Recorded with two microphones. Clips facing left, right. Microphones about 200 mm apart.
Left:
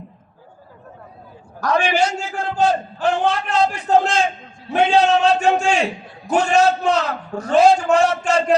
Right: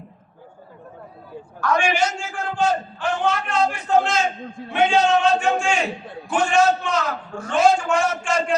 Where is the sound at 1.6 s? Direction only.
35° left (ahead or behind).